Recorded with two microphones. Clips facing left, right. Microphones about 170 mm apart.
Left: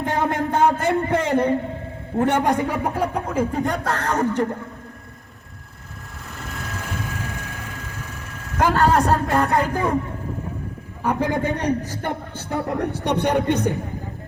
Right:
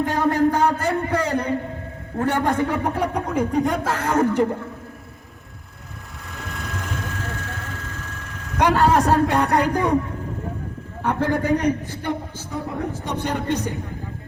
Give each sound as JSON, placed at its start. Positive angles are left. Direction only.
{"t": 0.0, "sound": "a sound", "side_deg": 20}
{"t": 2.1, "sound": "a man's voice", "side_deg": 20}
{"t": 4.2, "sound": "speech", "side_deg": -15}
{"t": 6.3, "sound": "vehicle", "side_deg": 0}
{"t": 7.9, "sound": "a woman's voice", "side_deg": 10}
{"t": 11.0, "sound": "a man's voice", "side_deg": 15}
{"t": 11.4, "sound": "a man's voice", "side_deg": 30}
{"t": 12.5, "sound": "speech", "side_deg": 70}